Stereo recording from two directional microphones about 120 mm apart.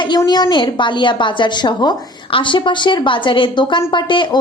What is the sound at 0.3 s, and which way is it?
A woman's voice, 35° left (ahead or behind).